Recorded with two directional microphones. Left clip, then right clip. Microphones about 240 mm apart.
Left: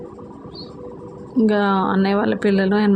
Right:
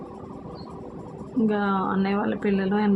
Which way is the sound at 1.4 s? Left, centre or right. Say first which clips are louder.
Left 7 dB; left.